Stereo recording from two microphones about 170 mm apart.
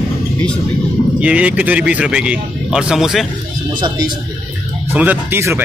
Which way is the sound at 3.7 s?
25° right (ahead or behind).